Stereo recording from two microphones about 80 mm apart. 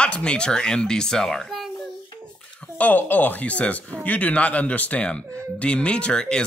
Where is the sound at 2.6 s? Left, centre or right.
Left.